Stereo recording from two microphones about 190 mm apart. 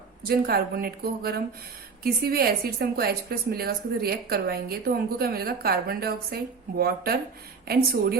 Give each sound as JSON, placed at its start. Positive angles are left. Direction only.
{"t": 0.2, "sound": "a woman's voice", "side_deg": -55}